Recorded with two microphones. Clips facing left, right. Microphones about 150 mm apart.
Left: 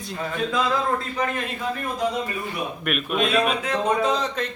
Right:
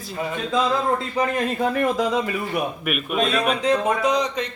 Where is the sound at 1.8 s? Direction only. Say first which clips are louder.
Right 5 dB; 90° right.